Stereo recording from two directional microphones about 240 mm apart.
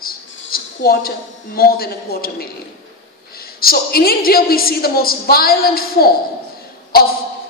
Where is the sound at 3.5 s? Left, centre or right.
Left.